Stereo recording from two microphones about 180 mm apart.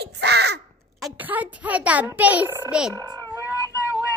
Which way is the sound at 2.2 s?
10° right (ahead or behind).